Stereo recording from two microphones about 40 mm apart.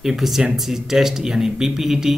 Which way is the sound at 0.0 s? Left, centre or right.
Centre.